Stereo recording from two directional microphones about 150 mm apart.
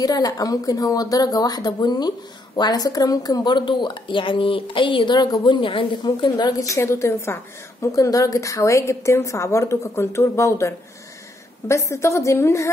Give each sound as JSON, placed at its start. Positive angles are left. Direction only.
{"t": 0.0, "sound": "a woman's voice", "side_deg": 25}